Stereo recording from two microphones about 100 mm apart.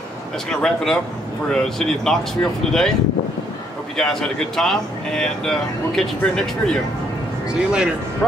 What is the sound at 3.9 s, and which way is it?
Speech, 5° left (ahead or behind).